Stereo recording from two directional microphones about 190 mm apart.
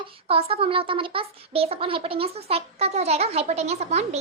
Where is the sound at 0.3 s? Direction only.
30° right (ahead or behind).